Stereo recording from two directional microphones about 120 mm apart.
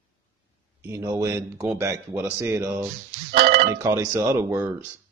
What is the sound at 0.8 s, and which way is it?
Speech, 25° right (ahead or behind).